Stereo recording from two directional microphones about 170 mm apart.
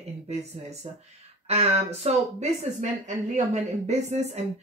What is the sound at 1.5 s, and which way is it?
Speech, 40° right (ahead or behind).